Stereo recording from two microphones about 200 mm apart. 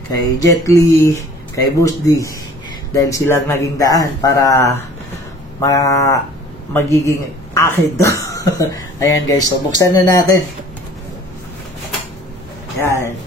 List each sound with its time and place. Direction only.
0.1 s speech: 15° left (ahead or behind)
12.8 s speech: 15° left (ahead or behind)